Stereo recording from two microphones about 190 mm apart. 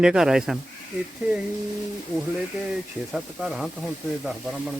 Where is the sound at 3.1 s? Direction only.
5° right (ahead or behind).